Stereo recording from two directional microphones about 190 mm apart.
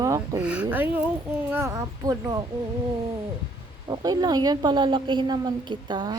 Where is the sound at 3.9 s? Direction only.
20° right (ahead or behind).